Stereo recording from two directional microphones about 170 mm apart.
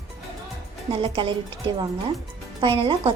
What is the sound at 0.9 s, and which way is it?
Speech, 30° right (ahead or behind).